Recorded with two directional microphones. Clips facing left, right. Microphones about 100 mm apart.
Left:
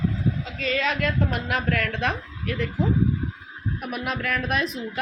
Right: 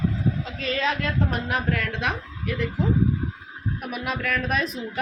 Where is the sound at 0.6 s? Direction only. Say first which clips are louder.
Left 1 dB; 30° right (ahead or behind).